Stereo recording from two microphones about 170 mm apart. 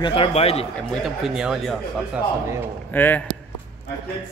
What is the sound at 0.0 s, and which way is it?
Speech, 35° left (ahead or behind).